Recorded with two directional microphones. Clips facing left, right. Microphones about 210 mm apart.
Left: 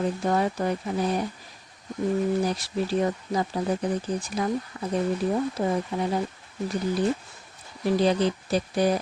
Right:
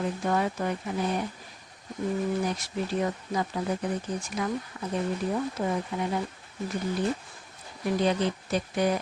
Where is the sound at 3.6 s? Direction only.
35° left (ahead or behind).